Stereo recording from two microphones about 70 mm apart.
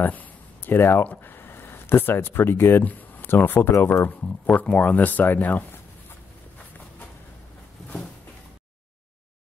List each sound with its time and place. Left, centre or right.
0.0 s speech: left
4.2 s speech: left